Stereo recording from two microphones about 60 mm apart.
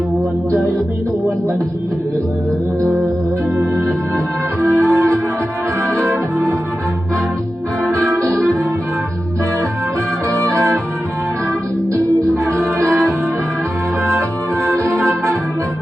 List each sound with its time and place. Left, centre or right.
4.6 s music: right
6.0 s organ: right
7.9 s music: right
10.2 s music: right
12.5 s music: right
14.0 s organ: right